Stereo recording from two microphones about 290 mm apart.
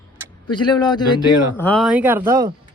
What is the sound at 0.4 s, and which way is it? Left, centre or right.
Speech, centre.